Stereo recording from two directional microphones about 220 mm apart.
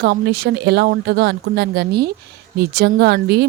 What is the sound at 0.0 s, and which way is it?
A woman's voice, 45° right (ahead or behind).